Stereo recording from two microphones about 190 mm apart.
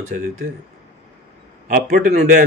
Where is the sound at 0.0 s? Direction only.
40° right (ahead or behind).